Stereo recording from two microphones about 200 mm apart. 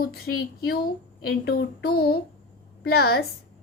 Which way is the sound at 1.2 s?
50° left (ahead or behind).